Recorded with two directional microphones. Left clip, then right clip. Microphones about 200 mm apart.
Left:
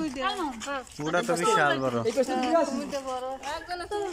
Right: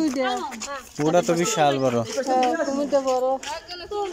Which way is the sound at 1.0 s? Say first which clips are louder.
Right 6 dB; 20° right (ahead or behind).